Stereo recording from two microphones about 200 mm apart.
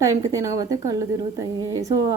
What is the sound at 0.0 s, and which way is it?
A woman's voice, 15° right (ahead or behind).